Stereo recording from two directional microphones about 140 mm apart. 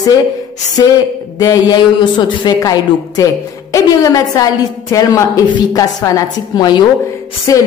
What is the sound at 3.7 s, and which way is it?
A woman's voice, 25° left (ahead or behind).